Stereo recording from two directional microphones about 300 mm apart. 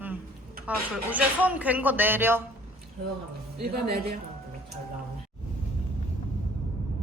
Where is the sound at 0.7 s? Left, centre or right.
Centre.